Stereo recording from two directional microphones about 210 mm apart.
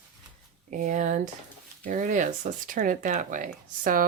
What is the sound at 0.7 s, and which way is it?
Speech, 35° right (ahead or behind).